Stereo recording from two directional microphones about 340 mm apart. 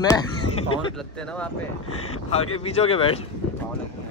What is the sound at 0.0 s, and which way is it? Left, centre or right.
Speech, centre.